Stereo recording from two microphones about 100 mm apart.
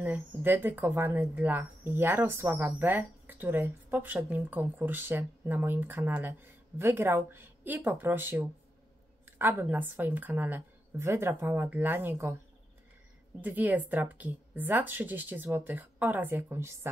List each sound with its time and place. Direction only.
0.0 s speech: 20° right (ahead or behind)
13.4 s speech: 15° right (ahead or behind)